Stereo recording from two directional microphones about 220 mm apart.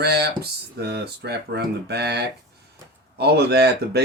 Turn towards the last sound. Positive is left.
turn(degrees=-45)  # may be behind; listen again after turning